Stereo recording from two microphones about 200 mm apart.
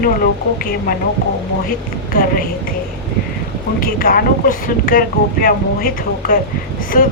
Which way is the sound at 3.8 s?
45° left (ahead or behind).